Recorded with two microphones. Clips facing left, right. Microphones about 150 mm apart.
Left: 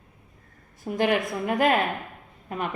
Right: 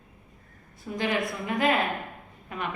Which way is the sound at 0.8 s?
50° left (ahead or behind).